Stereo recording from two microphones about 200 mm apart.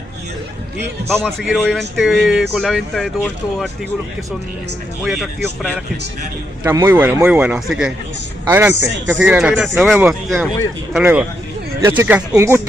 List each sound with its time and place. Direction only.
1.1 s speech: centre (ahead or behind)
5.0 s speech: centre (ahead or behind)
6.6 s a man's voice: 15° right (ahead or behind)